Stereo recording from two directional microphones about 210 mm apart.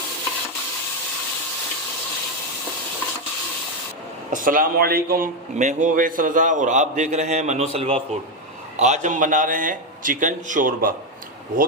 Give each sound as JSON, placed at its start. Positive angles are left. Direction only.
{"t": 4.3, "sound": "a man's voice", "side_deg": -40}